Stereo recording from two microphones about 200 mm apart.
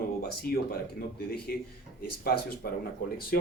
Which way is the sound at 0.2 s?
50° left (ahead or behind).